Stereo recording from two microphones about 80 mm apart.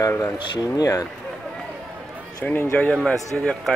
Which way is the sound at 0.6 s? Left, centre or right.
Left.